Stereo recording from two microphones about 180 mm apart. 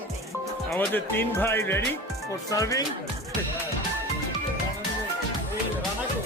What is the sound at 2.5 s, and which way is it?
Speech, 20° left (ahead or behind).